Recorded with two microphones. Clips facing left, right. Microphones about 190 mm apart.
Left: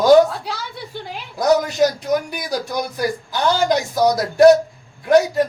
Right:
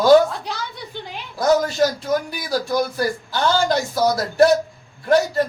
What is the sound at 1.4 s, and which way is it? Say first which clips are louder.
A man's voice: left 1 dB; 15° left (ahead or behind).